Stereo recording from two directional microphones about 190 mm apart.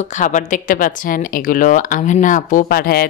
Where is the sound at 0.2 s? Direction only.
40° left (ahead or behind).